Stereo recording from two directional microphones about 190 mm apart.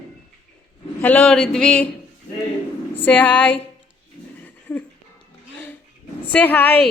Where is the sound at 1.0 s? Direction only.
5° left (ahead or behind).